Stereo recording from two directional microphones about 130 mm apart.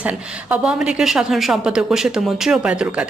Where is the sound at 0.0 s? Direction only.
10° right (ahead or behind).